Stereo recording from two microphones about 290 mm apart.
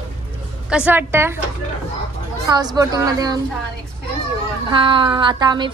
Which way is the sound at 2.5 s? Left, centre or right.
Centre.